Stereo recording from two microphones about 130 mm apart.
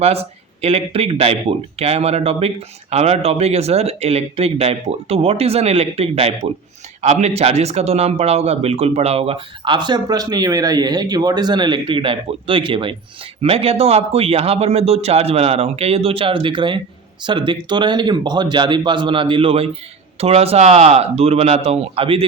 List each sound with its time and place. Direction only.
0.0 s speech: 50° right (ahead or behind)